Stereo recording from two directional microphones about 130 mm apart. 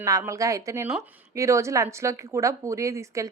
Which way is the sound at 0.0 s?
25° right (ahead or behind).